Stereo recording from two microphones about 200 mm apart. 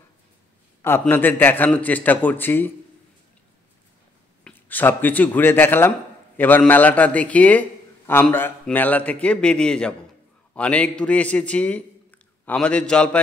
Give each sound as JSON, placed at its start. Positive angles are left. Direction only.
{"t": 0.8, "sound": "a man's voice", "side_deg": 10}
{"t": 4.5, "sound": "a man's voice", "side_deg": 10}